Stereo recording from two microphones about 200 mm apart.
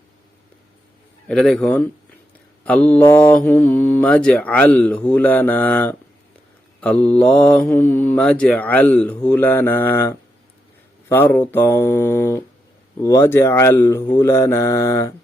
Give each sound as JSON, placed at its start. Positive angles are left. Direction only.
{"t": 1.3, "sound": "a man's voice", "side_deg": 5}
{"t": 2.6, "sound": "mantra", "side_deg": 5}